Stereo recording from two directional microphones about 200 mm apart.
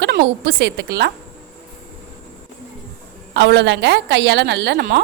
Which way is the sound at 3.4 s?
60° right (ahead or behind).